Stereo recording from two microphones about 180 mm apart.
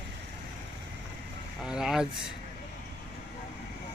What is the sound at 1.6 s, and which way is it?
Speech, 5° right (ahead or behind).